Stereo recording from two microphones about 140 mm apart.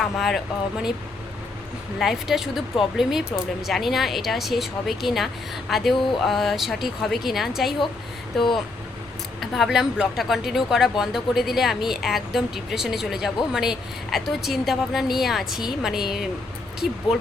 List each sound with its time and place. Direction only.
0.0 s speech: centre (ahead or behind)
2.0 s speech: centre (ahead or behind)
9.4 s speech: centre (ahead or behind)